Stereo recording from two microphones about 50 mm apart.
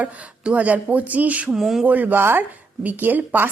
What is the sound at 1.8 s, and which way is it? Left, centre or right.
Speech, right.